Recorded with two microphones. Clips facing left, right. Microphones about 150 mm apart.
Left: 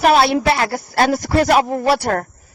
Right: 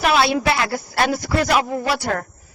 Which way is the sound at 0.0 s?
40° left (ahead or behind).